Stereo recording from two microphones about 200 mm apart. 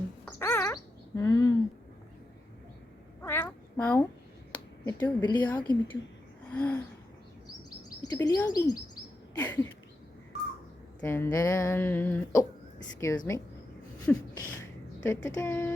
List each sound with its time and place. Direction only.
0.3 s bird: 10° left (ahead or behind)
3.2 s a sound: 10° left (ahead or behind)
5.0 s speech: 20° left (ahead or behind)
6.5 s a sound: 10° left (ahead or behind)
8.1 s speech: 20° left (ahead or behind)
11.0 s speech: 10° left (ahead or behind)